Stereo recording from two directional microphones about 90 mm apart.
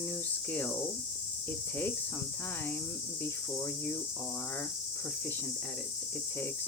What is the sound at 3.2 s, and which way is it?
Cricket, 25° left (ahead or behind).